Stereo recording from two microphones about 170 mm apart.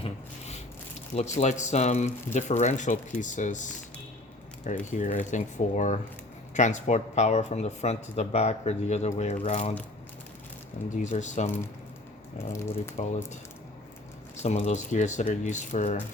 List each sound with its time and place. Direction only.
0.0 s rub: 40° left (ahead or behind)
1.4 s speech: 40° left (ahead or behind)
10.8 s speech: 45° left (ahead or behind)
12.4 s speech: 15° left (ahead or behind)
14.4 s speech: 40° left (ahead or behind)